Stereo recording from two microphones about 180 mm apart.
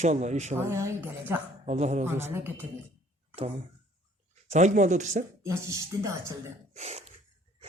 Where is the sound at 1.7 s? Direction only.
40° right (ahead or behind).